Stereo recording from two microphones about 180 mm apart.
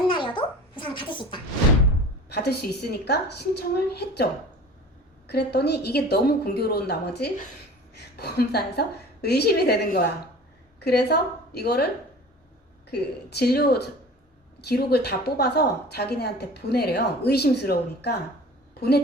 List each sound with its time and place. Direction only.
0.1 s a sound: 25° left (ahead or behind)
2.3 s a woman's voice: 65° left (ahead or behind)
5.3 s a woman's voice: 65° left (ahead or behind)
12.9 s a woman's voice: 60° left (ahead or behind)